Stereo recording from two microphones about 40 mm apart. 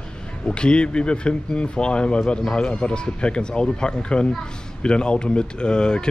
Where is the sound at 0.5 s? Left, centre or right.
Left.